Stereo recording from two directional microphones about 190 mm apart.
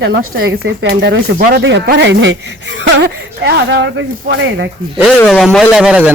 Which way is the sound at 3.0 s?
60° right (ahead or behind).